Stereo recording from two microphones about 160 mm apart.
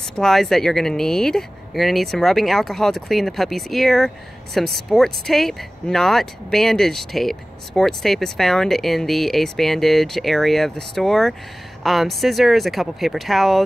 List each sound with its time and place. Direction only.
0.1 s speech: 5° left (ahead or behind)